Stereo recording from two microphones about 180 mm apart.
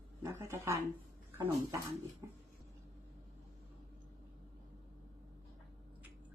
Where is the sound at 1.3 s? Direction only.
15° right (ahead or behind).